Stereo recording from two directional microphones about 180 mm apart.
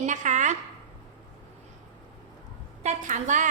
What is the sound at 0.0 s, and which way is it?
Speech, 40° right (ahead or behind).